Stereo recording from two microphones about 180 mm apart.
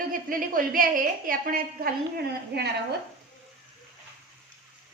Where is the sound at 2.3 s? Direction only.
65° right (ahead or behind).